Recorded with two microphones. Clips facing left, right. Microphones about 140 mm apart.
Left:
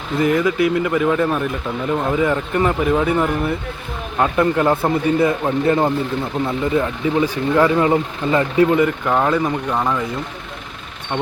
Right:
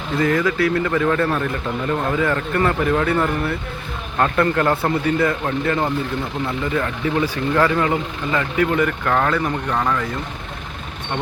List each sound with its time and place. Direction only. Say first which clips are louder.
0.2 s speech: left 2 dB; 20° left (ahead or behind)